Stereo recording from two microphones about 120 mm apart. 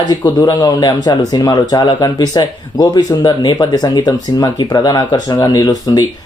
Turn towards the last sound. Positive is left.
turn(degrees=30)  # may be behind; listen again after turning